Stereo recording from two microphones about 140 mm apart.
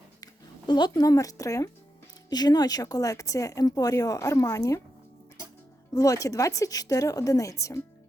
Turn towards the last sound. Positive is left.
turn(degrees=20)  # may be behind; listen again after turning